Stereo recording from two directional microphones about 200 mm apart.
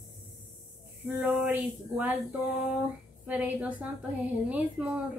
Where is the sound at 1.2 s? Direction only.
10° right (ahead or behind).